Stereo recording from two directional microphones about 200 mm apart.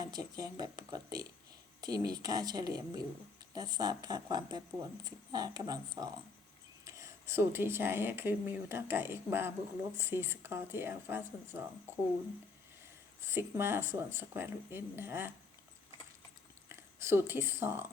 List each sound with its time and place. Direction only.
0.0 s speech: 20° right (ahead or behind)
13.2 s speech: 10° right (ahead or behind)
16.6 s speech: 15° right (ahead or behind)